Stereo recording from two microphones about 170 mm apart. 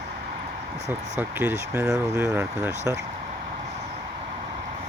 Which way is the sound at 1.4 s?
10° right (ahead or behind).